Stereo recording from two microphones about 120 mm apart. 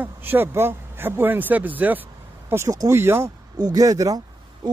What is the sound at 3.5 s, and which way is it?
Speech, 35° right (ahead or behind).